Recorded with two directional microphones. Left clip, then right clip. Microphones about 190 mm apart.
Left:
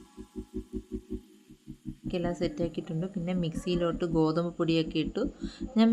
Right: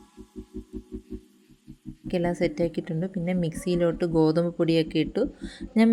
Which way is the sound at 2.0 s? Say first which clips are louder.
Right 6 dB; 25° right (ahead or behind).